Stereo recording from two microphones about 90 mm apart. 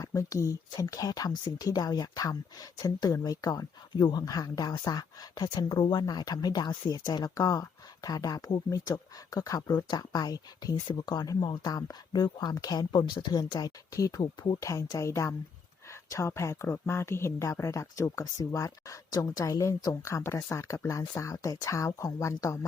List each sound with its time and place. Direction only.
0.0 s a woman's voice: 40° left (ahead or behind)